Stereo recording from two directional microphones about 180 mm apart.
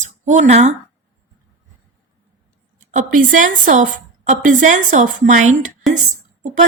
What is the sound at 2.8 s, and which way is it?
A woman's voice, 45° right (ahead or behind).